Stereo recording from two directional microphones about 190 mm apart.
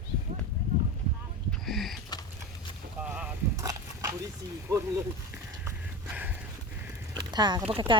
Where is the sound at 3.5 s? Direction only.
20° right (ahead or behind).